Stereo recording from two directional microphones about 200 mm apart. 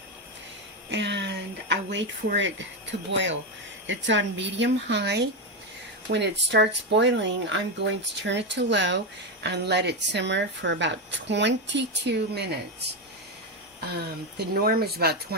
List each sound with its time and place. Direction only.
0.9 s speech: 60° right (ahead or behind)